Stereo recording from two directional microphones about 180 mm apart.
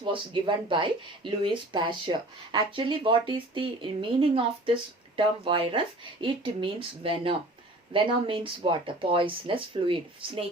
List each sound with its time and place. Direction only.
0.0 s speech: 25° right (ahead or behind)